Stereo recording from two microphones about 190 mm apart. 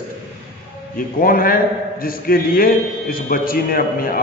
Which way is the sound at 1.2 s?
50° left (ahead or behind).